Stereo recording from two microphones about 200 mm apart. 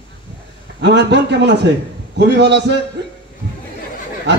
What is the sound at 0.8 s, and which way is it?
A man's voice, 60° right (ahead or behind).